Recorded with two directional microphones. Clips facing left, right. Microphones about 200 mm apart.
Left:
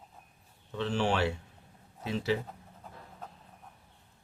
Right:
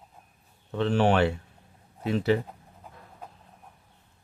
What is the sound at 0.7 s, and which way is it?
Speech, 55° right (ahead or behind).